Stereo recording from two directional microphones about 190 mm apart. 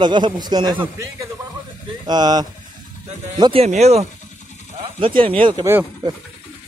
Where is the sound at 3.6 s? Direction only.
35° right (ahead or behind).